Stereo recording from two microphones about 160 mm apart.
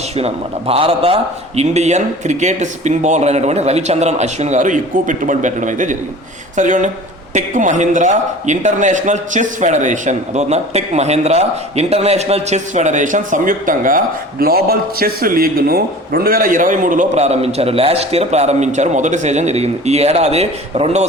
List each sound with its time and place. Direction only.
0.2 s speech: 40° right (ahead or behind)